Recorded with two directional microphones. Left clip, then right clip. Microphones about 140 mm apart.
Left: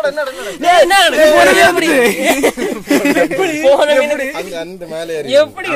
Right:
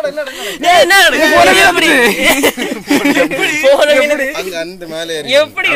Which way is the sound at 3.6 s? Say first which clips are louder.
Right 1 dB; 5° left (ahead or behind).